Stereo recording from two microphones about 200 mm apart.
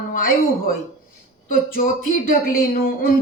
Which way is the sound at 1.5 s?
45° left (ahead or behind).